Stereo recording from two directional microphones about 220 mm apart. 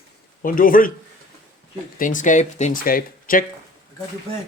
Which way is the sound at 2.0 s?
35° left (ahead or behind).